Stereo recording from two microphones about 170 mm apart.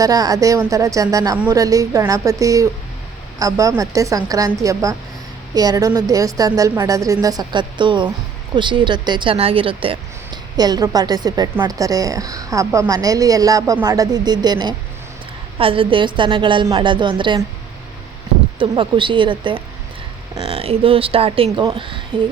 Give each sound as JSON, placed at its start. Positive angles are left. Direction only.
{"t": 0.0, "sound": "a woman's voice", "side_deg": -20}
{"t": 18.6, "sound": "a woman's voice", "side_deg": -30}